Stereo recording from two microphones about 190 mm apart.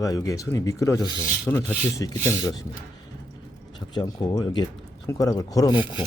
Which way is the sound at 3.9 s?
20° left (ahead or behind).